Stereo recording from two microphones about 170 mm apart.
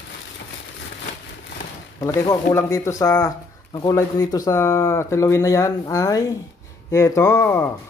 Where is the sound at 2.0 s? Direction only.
20° left (ahead or behind).